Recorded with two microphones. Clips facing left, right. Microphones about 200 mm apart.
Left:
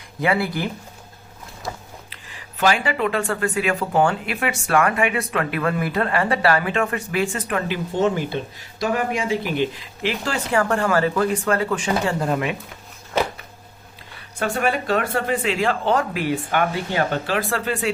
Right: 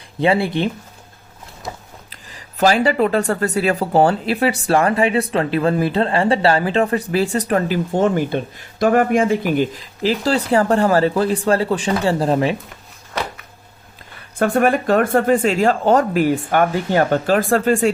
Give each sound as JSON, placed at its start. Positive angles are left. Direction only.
{"t": 0.2, "sound": "speech", "side_deg": -25}
{"t": 1.6, "sound": "biting", "side_deg": -20}
{"t": 2.0, "sound": "speech", "side_deg": -40}
{"t": 14.3, "sound": "speech", "side_deg": -50}